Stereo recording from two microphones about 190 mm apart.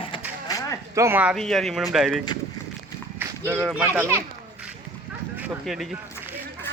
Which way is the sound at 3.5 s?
5° right (ahead or behind).